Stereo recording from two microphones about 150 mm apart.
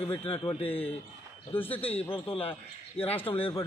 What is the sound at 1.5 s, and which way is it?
Speech, 15° left (ahead or behind).